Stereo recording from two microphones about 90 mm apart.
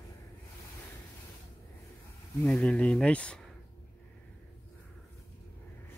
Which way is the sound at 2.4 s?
15° left (ahead or behind).